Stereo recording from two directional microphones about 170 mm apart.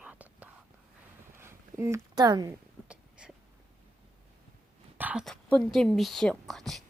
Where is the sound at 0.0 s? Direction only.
10° right (ahead or behind).